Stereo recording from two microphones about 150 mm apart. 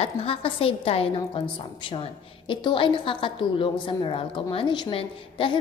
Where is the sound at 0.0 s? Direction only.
40° left (ahead or behind).